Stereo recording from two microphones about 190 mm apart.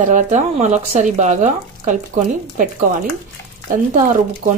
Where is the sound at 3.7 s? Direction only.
45° right (ahead or behind).